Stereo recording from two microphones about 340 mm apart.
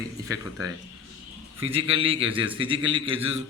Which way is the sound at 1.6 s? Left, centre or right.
Centre.